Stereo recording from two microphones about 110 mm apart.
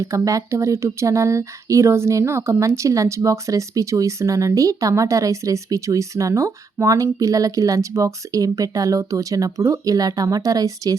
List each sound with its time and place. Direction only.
0.0 s speech: 30° right (ahead or behind)